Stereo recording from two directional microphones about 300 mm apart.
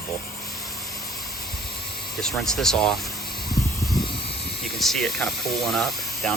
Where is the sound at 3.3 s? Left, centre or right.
Left.